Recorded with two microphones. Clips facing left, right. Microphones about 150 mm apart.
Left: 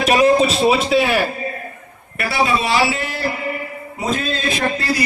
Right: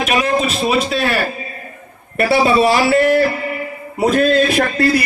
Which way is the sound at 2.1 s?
30° right (ahead or behind).